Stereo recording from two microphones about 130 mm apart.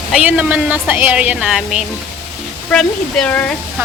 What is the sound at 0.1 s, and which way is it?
A woman's voice, 10° right (ahead or behind).